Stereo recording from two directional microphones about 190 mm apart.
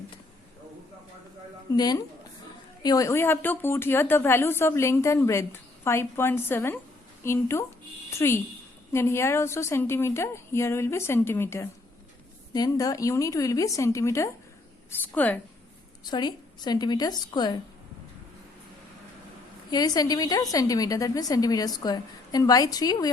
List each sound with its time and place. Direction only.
1.7 s a woman's voice: 20° left (ahead or behind)
16.0 s a woman's voice: 20° left (ahead or behind)
19.7 s a woman's voice: 20° left (ahead or behind)